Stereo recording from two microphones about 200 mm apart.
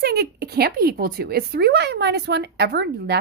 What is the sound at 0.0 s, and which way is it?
Speech, 50° right (ahead or behind).